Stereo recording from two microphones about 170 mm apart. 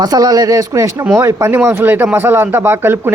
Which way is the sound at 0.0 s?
20° right (ahead or behind).